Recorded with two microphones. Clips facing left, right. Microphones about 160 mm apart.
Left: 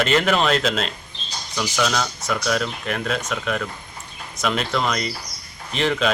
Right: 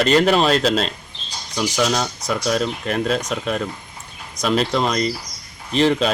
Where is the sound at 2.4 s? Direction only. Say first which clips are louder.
Right 4 dB; 35° right (ahead or behind).